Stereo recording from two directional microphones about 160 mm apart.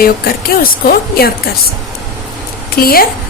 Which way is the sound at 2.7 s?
65° left (ahead or behind).